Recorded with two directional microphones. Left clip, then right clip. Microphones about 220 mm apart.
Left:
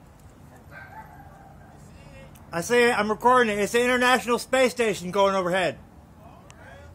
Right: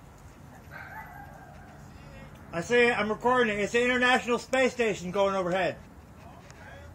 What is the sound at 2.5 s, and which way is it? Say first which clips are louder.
A man's voice: left 3 dB; 35° left (ahead or behind).